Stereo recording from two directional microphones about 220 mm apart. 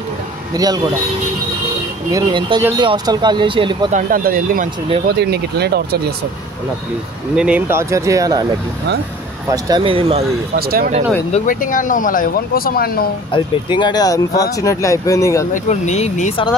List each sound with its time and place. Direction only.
2.0 s speech: 20° right (ahead or behind)
3.9 s speech: 40° right (ahead or behind)
7.3 s speech: 5° right (ahead or behind)
9.5 s speech: 20° right (ahead or behind)
10.6 s speech: 40° right (ahead or behind)
11.3 s speech: 35° left (ahead or behind)
13.3 s speech: 20° left (ahead or behind)
15.5 s speech: 35° left (ahead or behind)